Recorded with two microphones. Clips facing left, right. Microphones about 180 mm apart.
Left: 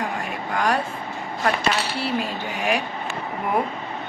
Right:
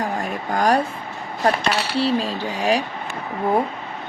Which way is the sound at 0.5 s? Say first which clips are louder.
Right 4 dB; 40° right (ahead or behind).